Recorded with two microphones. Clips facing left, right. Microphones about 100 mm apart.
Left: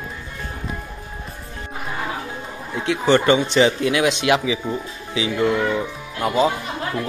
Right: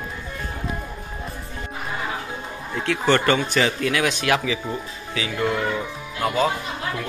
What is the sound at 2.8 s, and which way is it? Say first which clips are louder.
Speech: left 3 dB; 15° left (ahead or behind).